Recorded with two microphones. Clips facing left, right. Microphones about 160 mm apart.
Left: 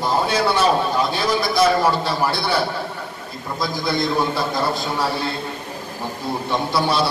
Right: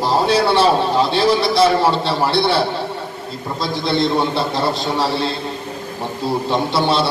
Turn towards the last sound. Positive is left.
turn(degrees=-25)  # may be behind; listen again after turning